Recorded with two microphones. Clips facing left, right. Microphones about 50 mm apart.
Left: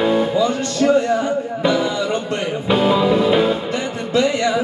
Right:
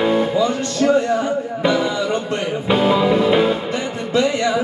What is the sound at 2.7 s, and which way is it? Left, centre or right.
Music, centre.